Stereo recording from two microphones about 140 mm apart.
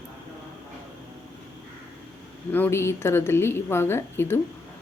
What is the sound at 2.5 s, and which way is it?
A woman's voice, 15° left (ahead or behind).